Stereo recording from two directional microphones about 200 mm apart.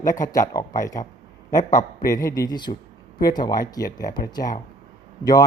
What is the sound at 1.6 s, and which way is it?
Speech, 40° left (ahead or behind).